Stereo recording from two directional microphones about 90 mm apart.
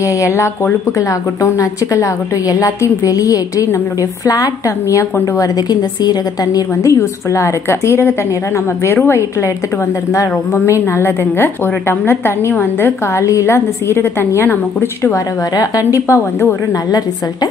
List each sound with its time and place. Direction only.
0.9 s a woman's voice: 35° left (ahead or behind)
13.2 s a woman's voice: 35° left (ahead or behind)